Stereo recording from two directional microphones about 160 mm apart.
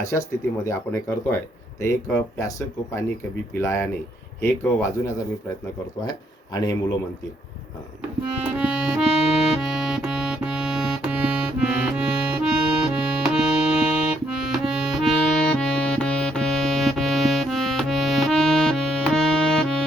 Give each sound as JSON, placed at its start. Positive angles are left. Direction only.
{"t": 0.1, "sound": "speech", "side_deg": 15}
{"t": 8.4, "sound": "music", "side_deg": -5}